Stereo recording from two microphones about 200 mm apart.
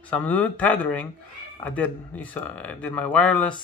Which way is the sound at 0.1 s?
10° left (ahead or behind).